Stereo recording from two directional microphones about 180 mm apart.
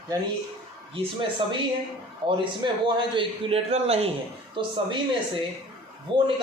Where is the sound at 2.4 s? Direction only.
30° right (ahead or behind).